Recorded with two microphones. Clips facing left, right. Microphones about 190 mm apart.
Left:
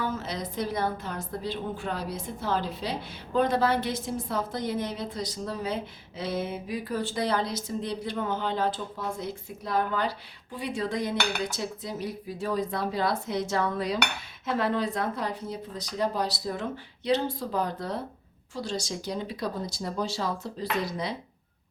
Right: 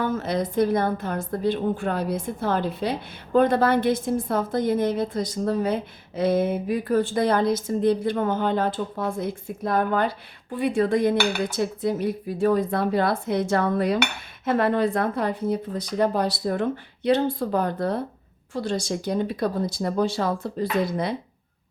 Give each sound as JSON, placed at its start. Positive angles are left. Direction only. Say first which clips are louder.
{"t": 0.0, "sound": "a woman's voice", "louder": "right 7 dB", "side_deg": -55}